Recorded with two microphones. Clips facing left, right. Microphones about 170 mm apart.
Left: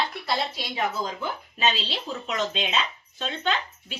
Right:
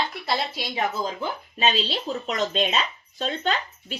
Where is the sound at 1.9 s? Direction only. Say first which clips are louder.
Right 3 dB; 40° right (ahead or behind).